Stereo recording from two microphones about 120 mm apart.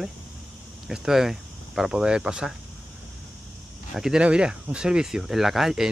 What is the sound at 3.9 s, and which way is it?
Speech, 5° right (ahead or behind).